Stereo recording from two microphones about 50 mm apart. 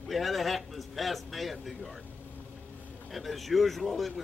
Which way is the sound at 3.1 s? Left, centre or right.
Centre.